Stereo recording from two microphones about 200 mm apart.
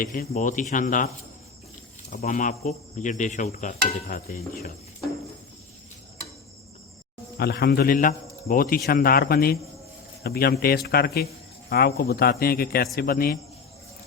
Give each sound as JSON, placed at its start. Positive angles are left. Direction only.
{"t": 0.0, "sound": "insect", "side_deg": 40}
{"t": 2.2, "sound": "insect", "side_deg": 40}
{"t": 7.3, "sound": "a man's voice", "side_deg": 55}